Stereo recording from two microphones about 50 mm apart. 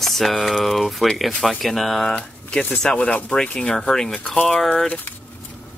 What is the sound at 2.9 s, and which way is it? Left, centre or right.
Speech, left.